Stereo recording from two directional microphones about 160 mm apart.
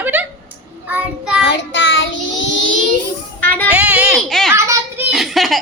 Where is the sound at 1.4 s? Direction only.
90° left.